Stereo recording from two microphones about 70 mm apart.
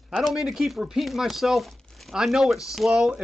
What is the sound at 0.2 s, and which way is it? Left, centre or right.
Speech, centre.